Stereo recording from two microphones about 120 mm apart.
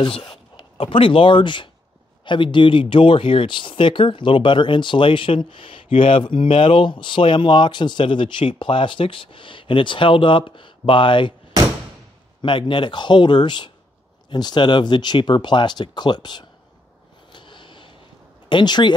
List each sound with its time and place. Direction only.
0.0 s speech: 45° left (ahead or behind)
12.4 s speech: 40° left (ahead or behind)
17.3 s a sound: 40° left (ahead or behind)
18.5 s speech: 40° left (ahead or behind)